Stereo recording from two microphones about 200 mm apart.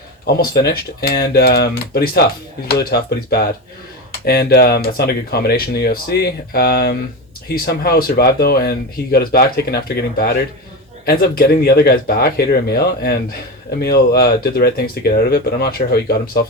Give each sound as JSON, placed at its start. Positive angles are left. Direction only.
{"t": 0.3, "sound": "speech", "side_deg": 50}